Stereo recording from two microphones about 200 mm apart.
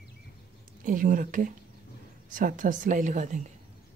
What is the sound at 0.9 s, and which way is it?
Speech, 45° right (ahead or behind).